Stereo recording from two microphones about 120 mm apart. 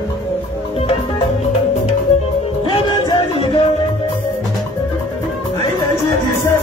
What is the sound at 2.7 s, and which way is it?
Music, 50° left (ahead or behind).